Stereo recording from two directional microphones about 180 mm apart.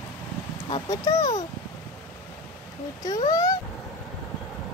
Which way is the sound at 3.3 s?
20° left (ahead or behind).